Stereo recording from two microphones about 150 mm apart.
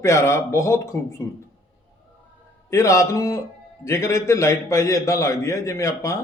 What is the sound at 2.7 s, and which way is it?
A man's voice, 20° left (ahead or behind).